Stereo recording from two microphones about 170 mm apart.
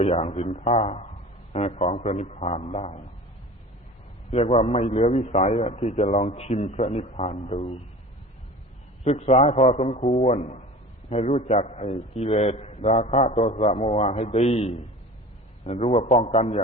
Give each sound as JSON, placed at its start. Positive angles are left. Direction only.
{"t": 0.0, "sound": "a man's voice", "side_deg": 35}
{"t": 4.3, "sound": "a man's voice", "side_deg": 40}
{"t": 9.0, "sound": "a man's voice", "side_deg": 40}
{"t": 12.3, "sound": "a man's voice", "side_deg": 25}
{"t": 12.5, "sound": "a man's voice", "side_deg": 40}